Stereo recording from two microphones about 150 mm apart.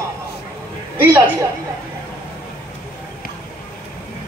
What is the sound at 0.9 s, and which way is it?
Speech, 15° right (ahead or behind).